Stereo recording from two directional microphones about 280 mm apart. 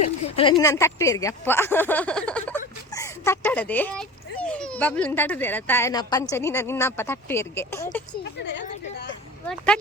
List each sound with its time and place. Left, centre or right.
0.2 s a child's voice: centre
8.2 s speech: left